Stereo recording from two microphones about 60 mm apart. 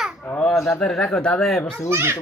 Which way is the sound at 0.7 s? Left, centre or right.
Centre.